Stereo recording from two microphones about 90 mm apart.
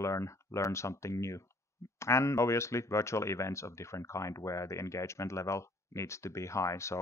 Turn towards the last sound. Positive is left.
turn(degrees=30)  # may be behind; listen again after turning